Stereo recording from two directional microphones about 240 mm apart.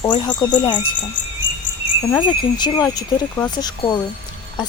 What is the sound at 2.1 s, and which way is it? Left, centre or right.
Speech, centre.